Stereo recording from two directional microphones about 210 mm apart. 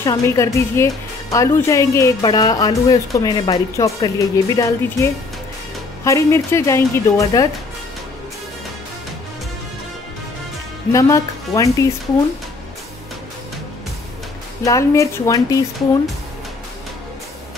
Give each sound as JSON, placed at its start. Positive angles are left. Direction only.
{"t": 0.0, "sound": "speech", "side_deg": 15}
{"t": 10.9, "sound": "speech", "side_deg": 15}
{"t": 14.6, "sound": "speech", "side_deg": 15}